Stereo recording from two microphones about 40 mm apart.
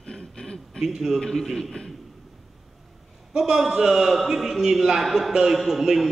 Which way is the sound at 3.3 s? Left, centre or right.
Centre.